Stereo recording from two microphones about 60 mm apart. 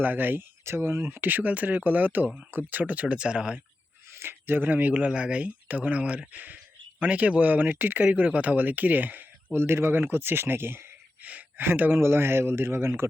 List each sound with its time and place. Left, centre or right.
0.0 s speech: right
0.6 s speech: right
1.1 s speech: right; by 3.6 s centre
4.2 s speech: right
9.5 s speech: right
11.2 s gasp: right
11.6 s speech: right